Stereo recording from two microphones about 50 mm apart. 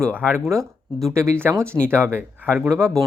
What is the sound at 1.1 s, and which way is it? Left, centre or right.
Speech, right.